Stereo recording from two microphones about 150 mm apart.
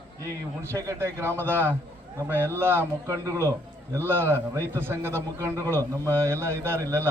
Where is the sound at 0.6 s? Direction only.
20° right (ahead or behind).